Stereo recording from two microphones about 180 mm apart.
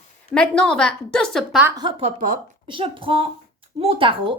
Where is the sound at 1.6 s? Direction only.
20° right (ahead or behind); by 2.4 s 40° right (ahead or behind).